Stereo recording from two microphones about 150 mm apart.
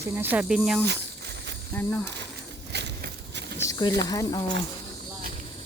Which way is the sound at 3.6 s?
25° left (ahead or behind).